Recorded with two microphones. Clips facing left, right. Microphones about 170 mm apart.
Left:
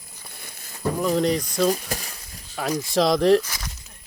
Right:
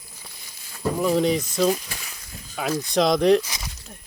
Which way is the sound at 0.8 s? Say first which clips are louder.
Right 1 dB; 5° right (ahead or behind).